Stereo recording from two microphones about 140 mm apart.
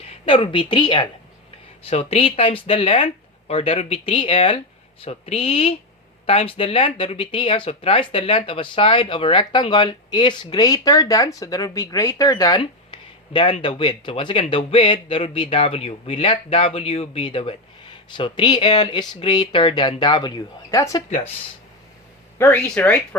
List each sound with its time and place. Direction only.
0.0 s a woman's voice: 45° left (ahead or behind)
1.9 s speech: 45° left (ahead or behind); by 21.0 s 25° left (ahead or behind)
22.4 s speech: 10° left (ahead or behind)